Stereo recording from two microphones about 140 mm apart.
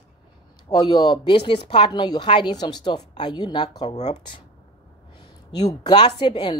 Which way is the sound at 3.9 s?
55° left (ahead or behind).